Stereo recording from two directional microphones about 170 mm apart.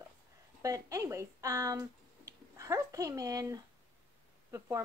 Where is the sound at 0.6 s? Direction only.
20° right (ahead or behind).